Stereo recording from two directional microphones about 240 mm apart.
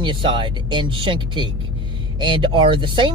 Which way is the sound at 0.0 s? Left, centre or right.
Centre.